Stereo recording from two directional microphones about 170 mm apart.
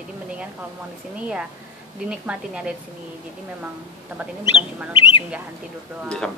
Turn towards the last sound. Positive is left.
turn(degrees=5)  # may be behind; listen again after turning